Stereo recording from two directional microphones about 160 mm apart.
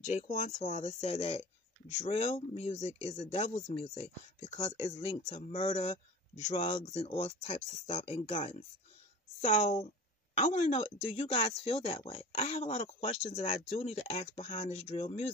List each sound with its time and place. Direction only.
0.1 s speech: 45° left (ahead or behind)
9.4 s speech: 50° left (ahead or behind)